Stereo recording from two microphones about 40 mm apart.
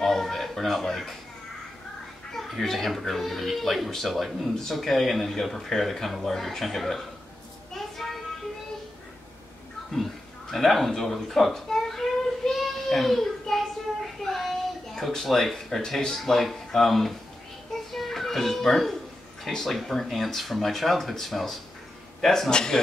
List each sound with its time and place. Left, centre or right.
0.0 s a sound: centre
2.3 s speech: centre
7.7 s child singing: centre
10.5 s a sound: centre
15.0 s speech: centre
22.5 s speech: centre